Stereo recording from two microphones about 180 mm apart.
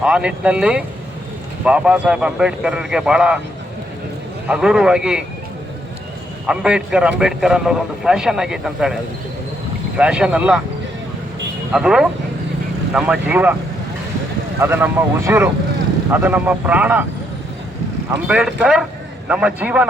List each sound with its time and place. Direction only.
0.0 s speech: 5° right (ahead or behind)
4.4 s speech: 5° right (ahead or behind)
6.5 s speech: 5° right (ahead or behind)
10.0 s speech: 5° right (ahead or behind)
11.7 s a man's voice: 5° right (ahead or behind)
14.6 s a man's voice: 15° right (ahead or behind)
18.1 s a man's voice: 5° right (ahead or behind)